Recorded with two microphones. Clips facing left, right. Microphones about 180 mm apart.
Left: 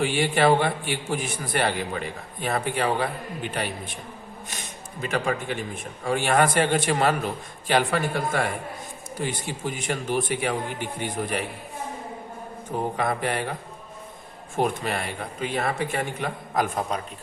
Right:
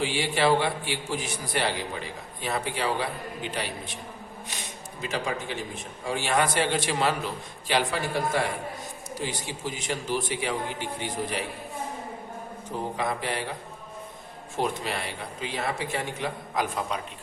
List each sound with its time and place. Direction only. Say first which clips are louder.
0.0 s speech: left 4 dB; 55° left (ahead or behind)
5.0 s a man's voice: left 4 dB; 55° left (ahead or behind)
13.0 s speech: left 3 dB; 55° left (ahead or behind)